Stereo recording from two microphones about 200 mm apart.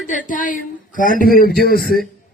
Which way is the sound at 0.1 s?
40° left (ahead or behind).